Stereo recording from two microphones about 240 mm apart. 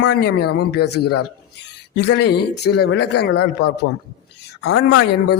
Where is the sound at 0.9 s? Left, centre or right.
Left.